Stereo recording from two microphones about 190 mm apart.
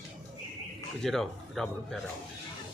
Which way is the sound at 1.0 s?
Centre (ahead or behind).